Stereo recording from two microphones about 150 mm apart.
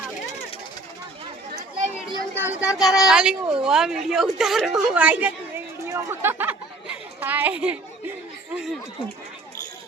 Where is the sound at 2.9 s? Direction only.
5° right (ahead or behind).